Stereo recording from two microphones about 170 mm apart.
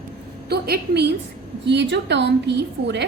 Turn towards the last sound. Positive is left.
turn(degrees=-90)